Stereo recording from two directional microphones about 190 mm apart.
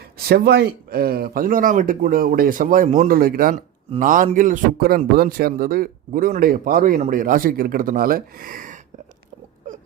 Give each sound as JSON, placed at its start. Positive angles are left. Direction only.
{"t": 0.3, "sound": "speech", "side_deg": -55}